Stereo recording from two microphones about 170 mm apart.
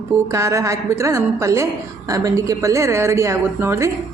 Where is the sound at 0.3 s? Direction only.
15° right (ahead or behind).